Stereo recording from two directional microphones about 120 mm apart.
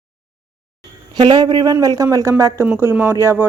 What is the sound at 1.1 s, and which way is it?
Speech, 40° right (ahead or behind).